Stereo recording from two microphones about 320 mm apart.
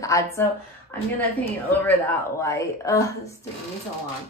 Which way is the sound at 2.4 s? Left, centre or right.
Centre.